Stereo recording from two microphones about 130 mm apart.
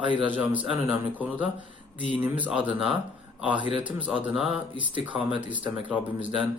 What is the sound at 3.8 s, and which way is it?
Speech, 10° right (ahead or behind).